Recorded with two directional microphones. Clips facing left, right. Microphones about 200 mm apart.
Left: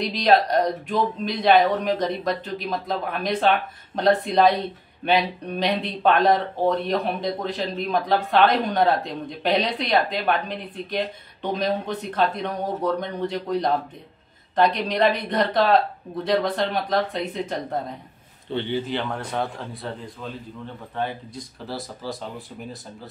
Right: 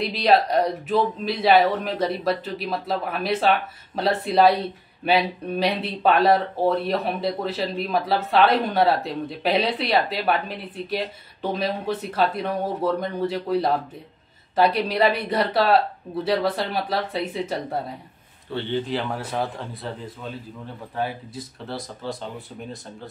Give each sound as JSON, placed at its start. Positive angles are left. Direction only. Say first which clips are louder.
{"t": 0.2, "sound": "speech", "louder": "even", "side_deg": -5}
{"t": 18.5, "sound": "a man's voice", "louder": "left 1 dB", "side_deg": 15}
{"t": 18.9, "sound": "speech", "louder": "right 1 dB", "side_deg": -5}